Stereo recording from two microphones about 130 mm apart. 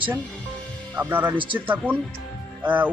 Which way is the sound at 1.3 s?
40° right (ahead or behind).